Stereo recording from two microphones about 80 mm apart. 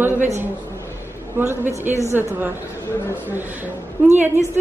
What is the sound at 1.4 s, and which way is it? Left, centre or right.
Speech, right.